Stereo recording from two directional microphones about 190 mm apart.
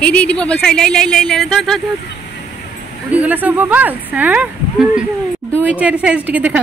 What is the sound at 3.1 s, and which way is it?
A woman's voice, 10° right (ahead or behind).